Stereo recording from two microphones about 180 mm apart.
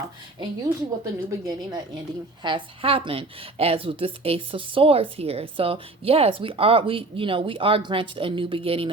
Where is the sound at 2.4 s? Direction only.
30° right (ahead or behind).